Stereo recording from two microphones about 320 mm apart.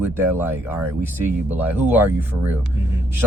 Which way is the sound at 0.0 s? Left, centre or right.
Centre.